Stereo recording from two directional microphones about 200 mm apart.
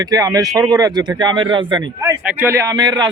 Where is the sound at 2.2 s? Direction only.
10° right (ahead or behind).